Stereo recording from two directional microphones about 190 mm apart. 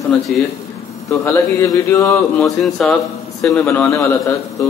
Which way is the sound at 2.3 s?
Centre (ahead or behind).